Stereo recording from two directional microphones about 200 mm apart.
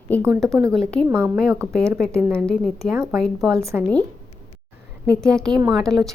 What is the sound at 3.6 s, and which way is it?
Speech, 15° right (ahead or behind).